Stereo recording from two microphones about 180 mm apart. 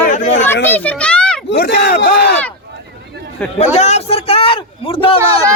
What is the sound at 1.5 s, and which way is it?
Speech, 60° left (ahead or behind).